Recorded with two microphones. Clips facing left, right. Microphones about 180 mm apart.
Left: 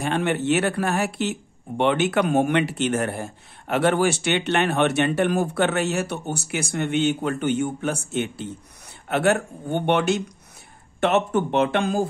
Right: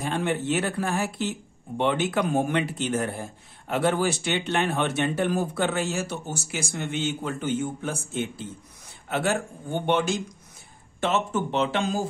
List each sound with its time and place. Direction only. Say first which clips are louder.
0.0 s speech: left 4 dB; 70° left (ahead or behind); by 12.0 s 55° left (ahead or behind)